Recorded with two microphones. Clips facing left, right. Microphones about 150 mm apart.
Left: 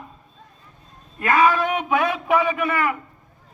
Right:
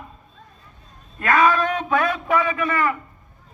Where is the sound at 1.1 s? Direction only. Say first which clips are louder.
Even; 15° left (ahead or behind).